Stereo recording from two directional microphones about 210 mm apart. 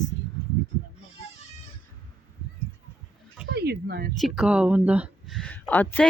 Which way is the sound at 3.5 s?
50° right (ahead or behind).